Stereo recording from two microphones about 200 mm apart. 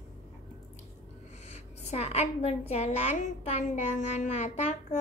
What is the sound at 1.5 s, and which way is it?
A woman's voice, 35° left (ahead or behind).